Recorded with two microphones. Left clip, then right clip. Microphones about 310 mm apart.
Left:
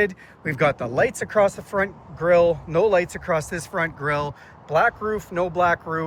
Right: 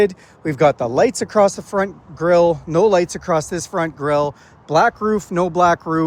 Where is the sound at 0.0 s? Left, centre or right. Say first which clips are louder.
Right 6 dB; centre.